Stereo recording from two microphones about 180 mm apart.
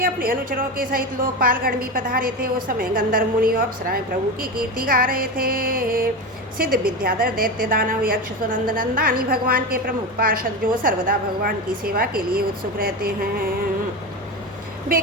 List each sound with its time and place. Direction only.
0.0 s a woman's voice: 50° right (ahead or behind)